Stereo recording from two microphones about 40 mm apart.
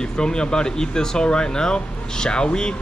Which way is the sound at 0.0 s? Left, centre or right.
Centre.